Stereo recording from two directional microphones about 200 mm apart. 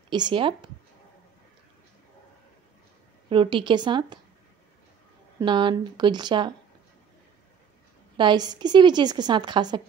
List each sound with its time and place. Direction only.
0.1 s a woman's voice: 25° right (ahead or behind)
3.3 s a woman's voice: 25° right (ahead or behind)
5.4 s a woman's voice: 25° right (ahead or behind)
8.2 s a woman's voice: 20° right (ahead or behind)